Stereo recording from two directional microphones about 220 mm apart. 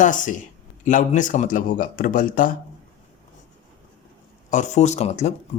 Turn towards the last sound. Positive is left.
turn(degrees=30)  # may be behind; listen again after turning